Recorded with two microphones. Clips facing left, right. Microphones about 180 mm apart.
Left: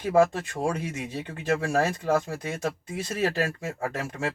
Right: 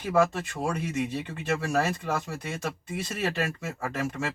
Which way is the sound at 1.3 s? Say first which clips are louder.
Left 2 dB; 50° left (ahead or behind).